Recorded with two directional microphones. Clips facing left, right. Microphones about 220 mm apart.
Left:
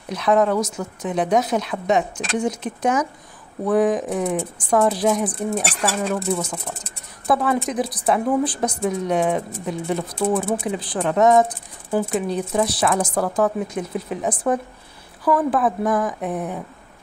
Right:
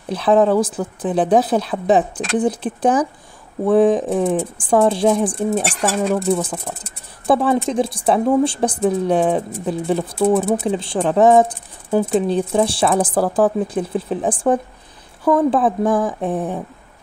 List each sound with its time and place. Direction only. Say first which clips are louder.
0.1 s speech: right 4 dB; 30° right (ahead or behind)
5.3 s speech: right 4 dB; centre (ahead or behind)
6.3 s a woman's voice: right 4 dB; 30° right (ahead or behind)